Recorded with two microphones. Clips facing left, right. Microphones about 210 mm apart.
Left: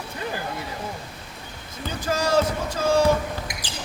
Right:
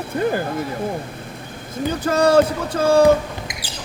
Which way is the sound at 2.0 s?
60° right (ahead or behind).